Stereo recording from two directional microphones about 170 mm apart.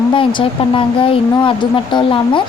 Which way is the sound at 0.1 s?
30° left (ahead or behind).